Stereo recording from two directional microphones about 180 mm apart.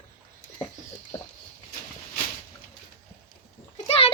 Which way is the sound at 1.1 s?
15° left (ahead or behind).